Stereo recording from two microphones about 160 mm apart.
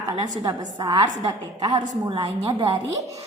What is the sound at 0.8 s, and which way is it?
A woman's voice, 25° right (ahead or behind).